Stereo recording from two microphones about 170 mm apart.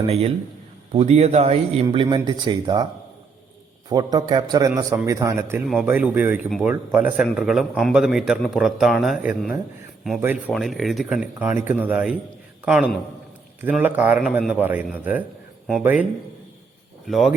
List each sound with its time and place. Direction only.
0.1 s speech: 35° right (ahead or behind)
2.0 s a man's voice: 25° right (ahead or behind)
3.8 s a man's voice: 25° right (ahead or behind)
10.5 s a man's voice: centre (ahead or behind)